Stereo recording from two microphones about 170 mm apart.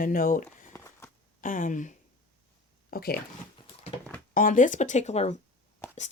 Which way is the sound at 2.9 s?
60° left (ahead or behind).